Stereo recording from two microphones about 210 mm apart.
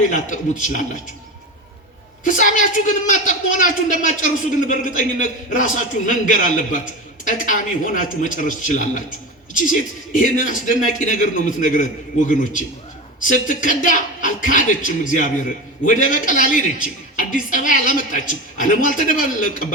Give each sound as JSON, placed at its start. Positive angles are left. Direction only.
{"t": 0.0, "sound": "a man's voice", "side_deg": 40}
{"t": 2.2, "sound": "a man's voice", "side_deg": 40}
{"t": 4.7, "sound": "a man's voice", "side_deg": 40}
{"t": 10.1, "sound": "a man's voice", "side_deg": 35}